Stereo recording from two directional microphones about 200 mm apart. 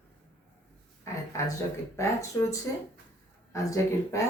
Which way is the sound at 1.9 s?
15° left (ahead or behind).